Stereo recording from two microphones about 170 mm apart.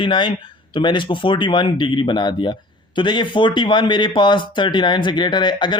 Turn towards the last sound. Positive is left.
turn(degrees=25)  # may be behind; listen again after turning